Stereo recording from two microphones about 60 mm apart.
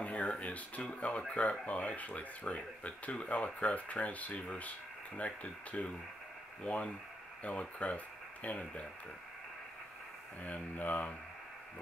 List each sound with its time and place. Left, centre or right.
0.0 s speech: left
10.4 s speech: left